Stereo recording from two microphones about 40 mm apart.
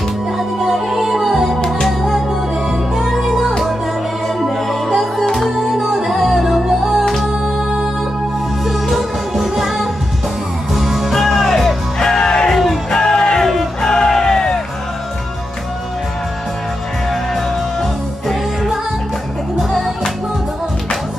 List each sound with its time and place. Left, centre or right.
0.6 s music: centre
7.1 s music: centre
12.0 s music: centre
12.5 s music: centre
13.0 s music: centre
13.4 s music: centre
13.9 s music: centre
18.3 s music: centre